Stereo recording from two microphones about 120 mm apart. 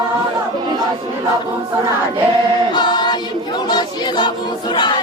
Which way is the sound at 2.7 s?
40° left (ahead or behind).